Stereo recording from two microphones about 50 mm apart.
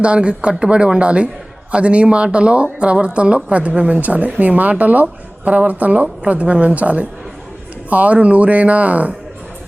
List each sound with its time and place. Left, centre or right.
0.0 s a woman's voice: right